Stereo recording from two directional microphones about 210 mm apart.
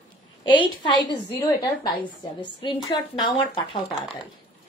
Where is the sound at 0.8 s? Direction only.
20° left (ahead or behind).